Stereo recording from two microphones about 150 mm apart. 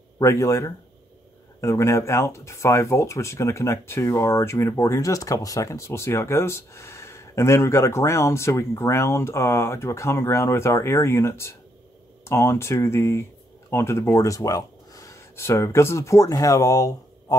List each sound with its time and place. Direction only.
0.2 s speech: 20° left (ahead or behind)